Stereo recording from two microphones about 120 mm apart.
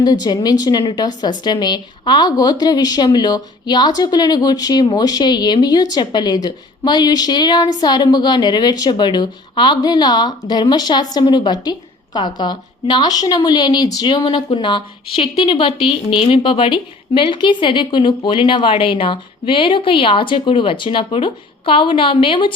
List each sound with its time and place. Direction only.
0.0 s a woman's voice: 35° left (ahead or behind)